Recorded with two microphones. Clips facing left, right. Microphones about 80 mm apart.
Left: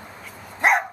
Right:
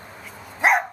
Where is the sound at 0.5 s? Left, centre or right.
Centre.